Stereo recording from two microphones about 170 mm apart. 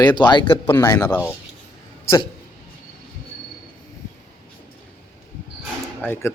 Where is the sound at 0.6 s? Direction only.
15° left (ahead or behind).